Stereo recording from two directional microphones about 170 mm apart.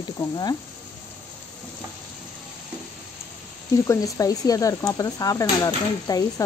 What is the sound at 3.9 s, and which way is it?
Speech, 20° left (ahead or behind).